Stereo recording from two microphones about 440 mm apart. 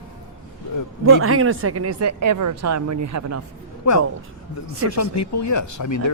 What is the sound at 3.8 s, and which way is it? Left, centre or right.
Speech, left.